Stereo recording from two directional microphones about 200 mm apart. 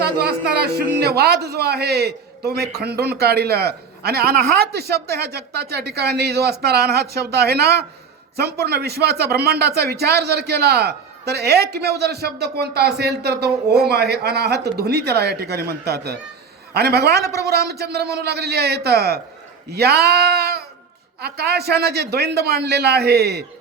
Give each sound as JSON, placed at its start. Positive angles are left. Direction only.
{"t": 0.0, "sound": "speech", "side_deg": -50}
{"t": 17.2, "sound": "speech", "side_deg": 15}
{"t": 17.4, "sound": "speech", "side_deg": -55}